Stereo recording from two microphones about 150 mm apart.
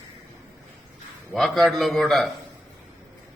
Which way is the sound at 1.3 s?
Centre (ahead or behind).